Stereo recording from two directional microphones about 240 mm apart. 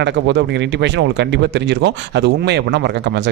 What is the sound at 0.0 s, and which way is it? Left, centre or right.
A man's voice, right.